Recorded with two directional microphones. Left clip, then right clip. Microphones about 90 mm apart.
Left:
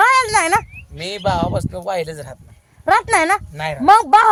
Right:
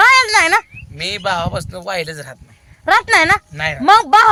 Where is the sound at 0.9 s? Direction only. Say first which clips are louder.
Right 1 dB; 25° left (ahead or behind).